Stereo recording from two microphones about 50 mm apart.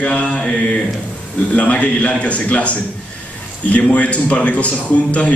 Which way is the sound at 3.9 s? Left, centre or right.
Left.